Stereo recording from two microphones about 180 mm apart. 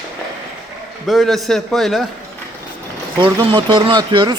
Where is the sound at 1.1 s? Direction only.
Centre (ahead or behind).